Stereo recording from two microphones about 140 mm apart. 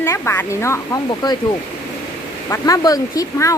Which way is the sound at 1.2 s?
30° left (ahead or behind).